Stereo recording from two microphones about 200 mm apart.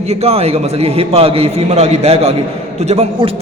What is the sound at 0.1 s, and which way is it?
A man's voice, 30° right (ahead or behind).